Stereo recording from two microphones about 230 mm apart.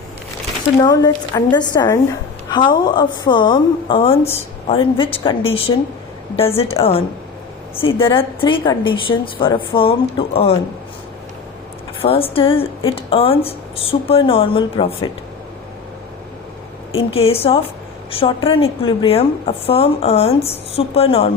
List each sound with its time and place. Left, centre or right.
0.8 s a woman's voice: centre
12.0 s a woman's voice: left
16.9 s a woman's voice: left